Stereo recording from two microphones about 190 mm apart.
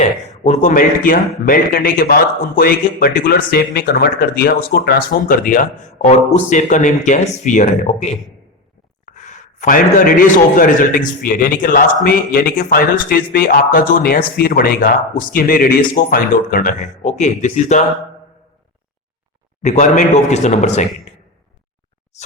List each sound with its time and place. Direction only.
0.0 s a man's voice: 35° left (ahead or behind)
9.1 s a man's voice: 40° left (ahead or behind)
19.6 s speech: 40° left (ahead or behind)